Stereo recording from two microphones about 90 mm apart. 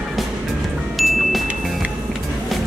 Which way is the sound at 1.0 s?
Centre (ahead or behind).